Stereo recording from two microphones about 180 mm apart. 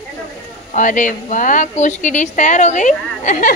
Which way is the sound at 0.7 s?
45° left (ahead or behind).